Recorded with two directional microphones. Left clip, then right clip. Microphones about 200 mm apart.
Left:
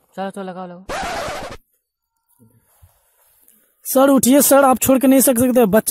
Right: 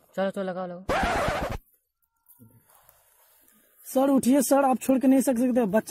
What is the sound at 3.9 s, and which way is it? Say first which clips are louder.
Speech: left 10 dB; 55° left (ahead or behind).